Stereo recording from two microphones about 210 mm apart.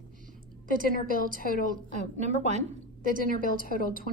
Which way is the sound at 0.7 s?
45° left (ahead or behind).